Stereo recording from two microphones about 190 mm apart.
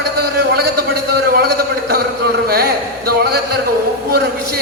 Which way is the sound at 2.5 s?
55° right (ahead or behind).